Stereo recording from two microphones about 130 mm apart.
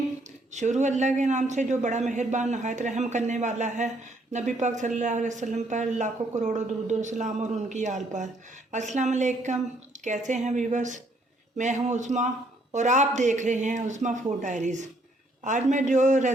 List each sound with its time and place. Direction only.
0.5 s a man's voice: 65° right (ahead or behind)